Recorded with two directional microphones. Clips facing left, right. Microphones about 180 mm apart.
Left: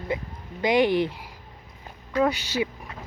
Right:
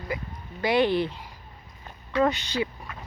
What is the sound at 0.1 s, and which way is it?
Speech, 25° left (ahead or behind).